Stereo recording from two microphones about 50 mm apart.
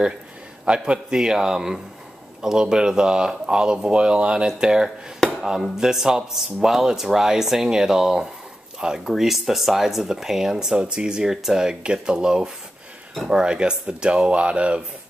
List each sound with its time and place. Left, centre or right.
0.7 s speech: centre